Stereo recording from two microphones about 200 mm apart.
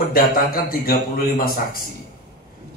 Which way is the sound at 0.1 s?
50° left (ahead or behind).